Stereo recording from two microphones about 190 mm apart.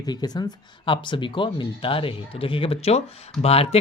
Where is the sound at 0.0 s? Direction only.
20° left (ahead or behind).